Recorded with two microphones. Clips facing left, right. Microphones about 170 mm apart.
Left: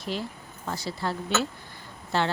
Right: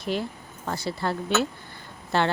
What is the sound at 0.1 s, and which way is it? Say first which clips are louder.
A woman's voice: right 4 dB; 55° right (ahead or behind).